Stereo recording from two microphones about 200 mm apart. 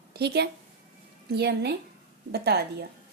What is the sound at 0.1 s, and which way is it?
A woman's voice, 55° right (ahead or behind).